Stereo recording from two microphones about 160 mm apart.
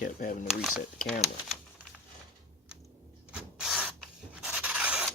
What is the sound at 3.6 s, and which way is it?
Rub, 5° right (ahead or behind).